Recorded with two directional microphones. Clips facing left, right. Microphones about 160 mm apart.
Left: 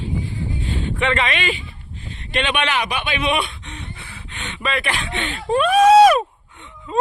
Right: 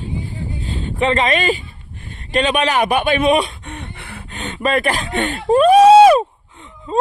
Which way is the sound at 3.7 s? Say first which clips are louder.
Right 4 dB; 60° right (ahead or behind).